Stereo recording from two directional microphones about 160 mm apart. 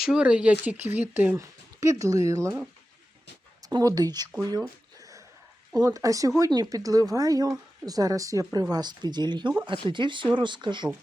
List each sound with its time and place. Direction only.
0.0 s speech: 5° right (ahead or behind)
3.6 s speech: 25° right (ahead or behind)
4.9 s a sound: 20° right (ahead or behind)
5.7 s speech: 20° right (ahead or behind)